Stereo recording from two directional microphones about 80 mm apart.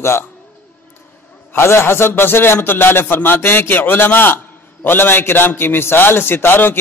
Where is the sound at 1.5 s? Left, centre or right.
Left.